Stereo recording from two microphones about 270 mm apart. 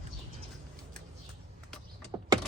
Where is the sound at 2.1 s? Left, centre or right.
Centre.